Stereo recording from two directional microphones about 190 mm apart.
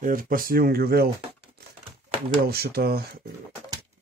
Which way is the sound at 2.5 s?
55° right (ahead or behind).